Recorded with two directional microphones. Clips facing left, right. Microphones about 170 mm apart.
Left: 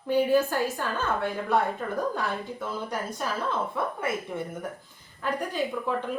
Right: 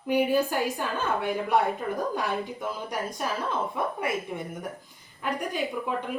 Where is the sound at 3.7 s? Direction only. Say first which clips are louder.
Right 1 dB; 15° right (ahead or behind).